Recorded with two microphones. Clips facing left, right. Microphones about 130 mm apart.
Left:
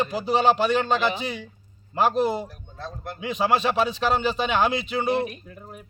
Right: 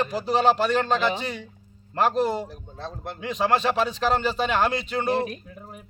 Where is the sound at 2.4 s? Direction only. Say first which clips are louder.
Right 1 dB; 25° right (ahead or behind).